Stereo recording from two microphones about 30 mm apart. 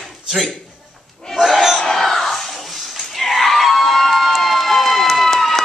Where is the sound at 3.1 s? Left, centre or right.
Centre.